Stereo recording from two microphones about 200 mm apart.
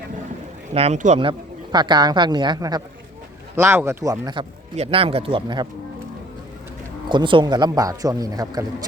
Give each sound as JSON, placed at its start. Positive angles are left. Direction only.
{"t": 0.7, "sound": "a man's voice", "side_deg": -30}
{"t": 7.1, "sound": "a man's voice", "side_deg": -25}